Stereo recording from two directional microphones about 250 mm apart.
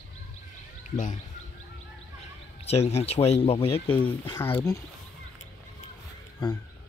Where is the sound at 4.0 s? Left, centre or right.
Centre.